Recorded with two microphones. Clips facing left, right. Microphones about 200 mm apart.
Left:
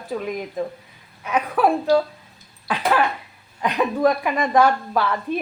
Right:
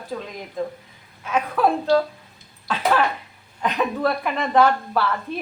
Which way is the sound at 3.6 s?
10° left (ahead or behind).